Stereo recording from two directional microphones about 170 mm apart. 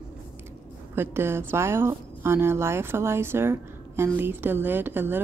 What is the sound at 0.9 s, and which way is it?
A woman's voice, 15° right (ahead or behind).